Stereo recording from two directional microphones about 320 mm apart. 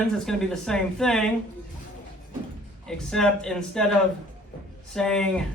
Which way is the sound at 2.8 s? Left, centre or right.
Centre.